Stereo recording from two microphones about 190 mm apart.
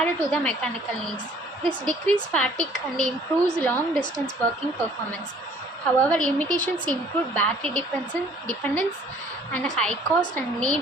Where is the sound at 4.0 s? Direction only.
20° left (ahead or behind).